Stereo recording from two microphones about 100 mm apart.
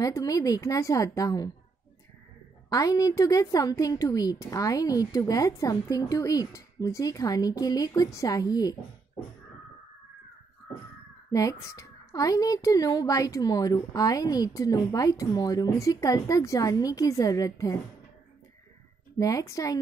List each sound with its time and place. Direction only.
0.0 s a child's voice: 35° left (ahead or behind)
2.7 s a child's voice: 40° left (ahead or behind)
11.3 s a child's voice: 35° left (ahead or behind)
19.1 s a child's voice: 35° left (ahead or behind)